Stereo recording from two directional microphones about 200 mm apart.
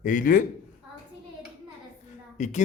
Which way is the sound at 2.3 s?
35° left (ahead or behind).